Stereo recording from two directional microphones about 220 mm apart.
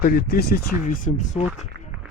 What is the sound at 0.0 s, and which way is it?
Speech, 40° left (ahead or behind).